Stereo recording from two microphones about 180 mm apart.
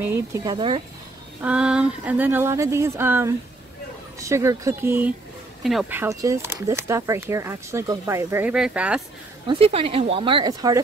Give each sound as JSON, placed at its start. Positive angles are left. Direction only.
{"t": 0.0, "sound": "speech", "side_deg": -15}
{"t": 1.4, "sound": "speech", "side_deg": -5}
{"t": 5.6, "sound": "speech", "side_deg": 0}
{"t": 9.5, "sound": "speech", "side_deg": -35}